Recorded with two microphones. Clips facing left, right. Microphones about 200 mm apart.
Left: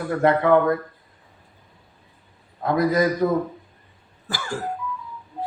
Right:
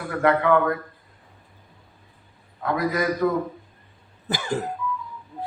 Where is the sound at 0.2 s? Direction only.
30° left (ahead or behind).